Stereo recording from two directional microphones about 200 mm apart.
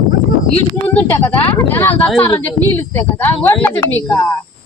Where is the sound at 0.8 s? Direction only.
10° left (ahead or behind).